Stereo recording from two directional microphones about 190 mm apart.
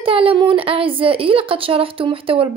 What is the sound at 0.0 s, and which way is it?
A woman's voice, 30° right (ahead or behind).